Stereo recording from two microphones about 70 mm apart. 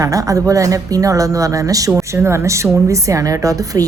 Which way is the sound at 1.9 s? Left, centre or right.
Right.